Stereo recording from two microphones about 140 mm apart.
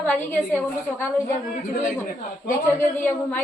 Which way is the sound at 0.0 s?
10° left (ahead or behind).